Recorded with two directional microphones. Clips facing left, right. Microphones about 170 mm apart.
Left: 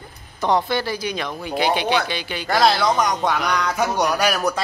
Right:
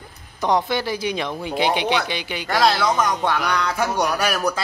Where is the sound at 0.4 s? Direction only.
15° right (ahead or behind).